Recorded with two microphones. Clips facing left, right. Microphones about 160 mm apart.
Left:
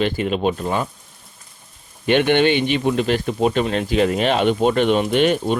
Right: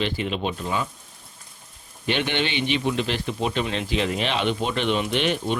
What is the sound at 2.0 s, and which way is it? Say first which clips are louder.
Speech: left 10 dB; 55° left (ahead or behind).